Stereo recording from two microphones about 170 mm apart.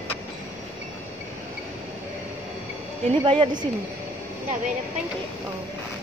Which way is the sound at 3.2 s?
30° right (ahead or behind).